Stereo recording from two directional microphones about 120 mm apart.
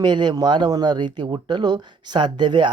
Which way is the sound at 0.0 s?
40° right (ahead or behind).